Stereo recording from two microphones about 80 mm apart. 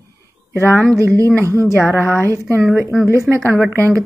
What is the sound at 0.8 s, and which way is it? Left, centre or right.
Speech, right.